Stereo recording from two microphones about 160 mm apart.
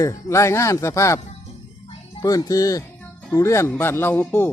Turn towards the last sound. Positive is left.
turn(degrees=15)  # may be behind; listen again after turning